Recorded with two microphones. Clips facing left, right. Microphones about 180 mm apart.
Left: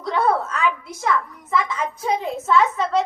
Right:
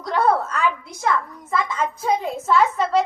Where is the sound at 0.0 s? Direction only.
Centre (ahead or behind).